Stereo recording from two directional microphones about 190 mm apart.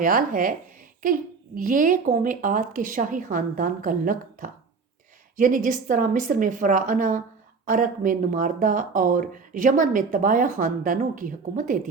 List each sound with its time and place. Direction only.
0.0 s speech: 45° right (ahead or behind)